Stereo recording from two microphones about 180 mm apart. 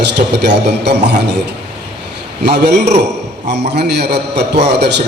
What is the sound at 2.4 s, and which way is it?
A man's voice, 65° right (ahead or behind).